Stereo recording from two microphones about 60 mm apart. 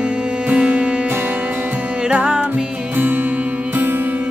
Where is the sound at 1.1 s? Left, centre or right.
Right.